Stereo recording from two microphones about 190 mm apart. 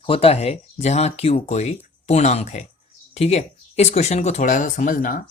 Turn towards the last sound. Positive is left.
turn(degrees=45)  # may be behind; listen again after turning